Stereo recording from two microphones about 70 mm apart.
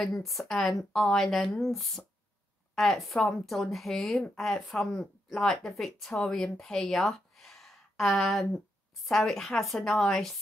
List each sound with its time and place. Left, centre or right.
0.0 s a woman's voice: centre